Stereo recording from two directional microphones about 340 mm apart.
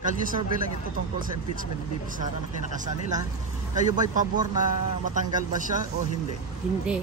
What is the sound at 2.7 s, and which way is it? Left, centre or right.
Speech, right.